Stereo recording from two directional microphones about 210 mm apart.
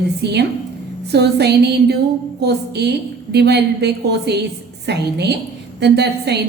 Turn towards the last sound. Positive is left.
turn(degrees=-50)  # may be behind; listen again after turning